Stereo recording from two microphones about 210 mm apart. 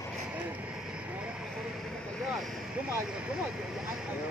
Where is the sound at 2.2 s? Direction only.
Centre (ahead or behind).